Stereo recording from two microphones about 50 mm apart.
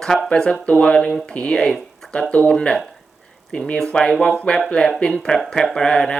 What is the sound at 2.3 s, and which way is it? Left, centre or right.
Speech, centre.